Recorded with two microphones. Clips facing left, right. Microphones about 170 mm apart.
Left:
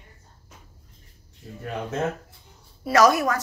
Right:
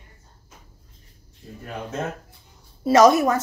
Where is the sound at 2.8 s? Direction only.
20° right (ahead or behind).